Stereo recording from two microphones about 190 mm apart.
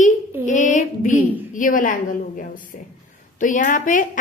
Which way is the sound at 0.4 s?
40° left (ahead or behind).